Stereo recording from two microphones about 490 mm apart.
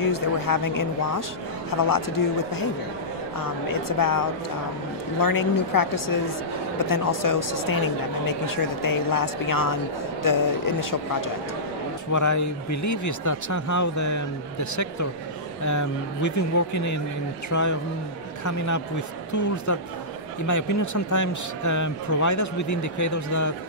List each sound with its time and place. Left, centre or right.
0.0 s speech: left
4.0 s speech: left